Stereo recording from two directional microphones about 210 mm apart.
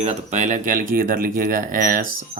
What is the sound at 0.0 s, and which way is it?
Speech, 35° right (ahead or behind).